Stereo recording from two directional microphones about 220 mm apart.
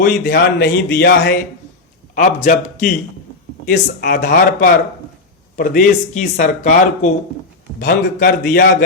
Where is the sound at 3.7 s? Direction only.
45° left (ahead or behind).